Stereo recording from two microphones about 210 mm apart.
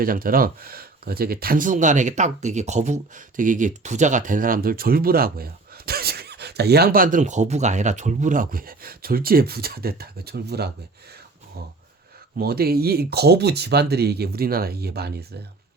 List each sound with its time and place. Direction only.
0.0 s speech: 45° right (ahead or behind)
12.4 s speech: 45° right (ahead or behind)